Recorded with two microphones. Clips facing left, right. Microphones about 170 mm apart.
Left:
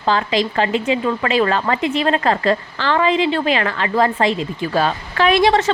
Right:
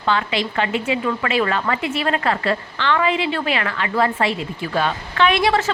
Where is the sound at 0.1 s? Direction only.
35° left (ahead or behind).